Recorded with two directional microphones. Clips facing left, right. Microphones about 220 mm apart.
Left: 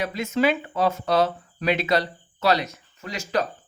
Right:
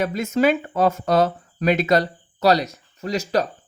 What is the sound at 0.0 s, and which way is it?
Speech, 45° right (ahead or behind).